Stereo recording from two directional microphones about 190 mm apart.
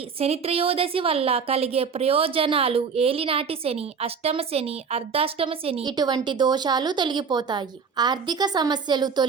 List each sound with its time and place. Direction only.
0.2 s a woman's voice: 30° right (ahead or behind)